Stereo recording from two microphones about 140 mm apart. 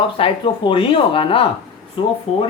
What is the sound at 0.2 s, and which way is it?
Speech, 40° left (ahead or behind).